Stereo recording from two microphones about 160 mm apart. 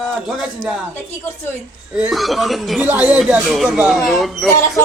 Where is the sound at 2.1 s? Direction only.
Centre (ahead or behind).